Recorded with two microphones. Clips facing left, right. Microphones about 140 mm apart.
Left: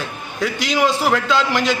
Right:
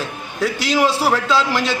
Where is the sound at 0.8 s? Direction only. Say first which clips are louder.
Left 1 dB; 35° right (ahead or behind).